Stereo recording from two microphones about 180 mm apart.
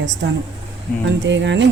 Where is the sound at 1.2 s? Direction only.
85° right.